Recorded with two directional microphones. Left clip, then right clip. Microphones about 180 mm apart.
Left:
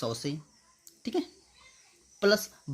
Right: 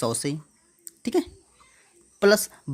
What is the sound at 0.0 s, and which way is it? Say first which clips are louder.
Speech: right 7 dB; 40° right (ahead or behind).